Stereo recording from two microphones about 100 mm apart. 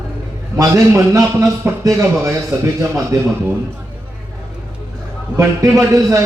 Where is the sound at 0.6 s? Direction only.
30° right (ahead or behind).